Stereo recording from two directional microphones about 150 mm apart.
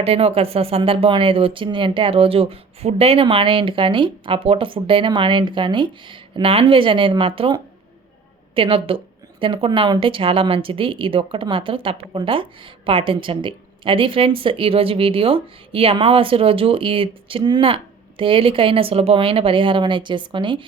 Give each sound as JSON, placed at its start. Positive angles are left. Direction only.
{"t": 0.0, "sound": "speech", "side_deg": -40}